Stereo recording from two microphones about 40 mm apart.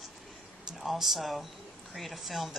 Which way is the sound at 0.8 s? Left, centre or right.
Centre.